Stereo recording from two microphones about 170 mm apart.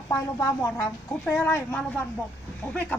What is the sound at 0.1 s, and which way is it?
A woman's voice, 20° left (ahead or behind).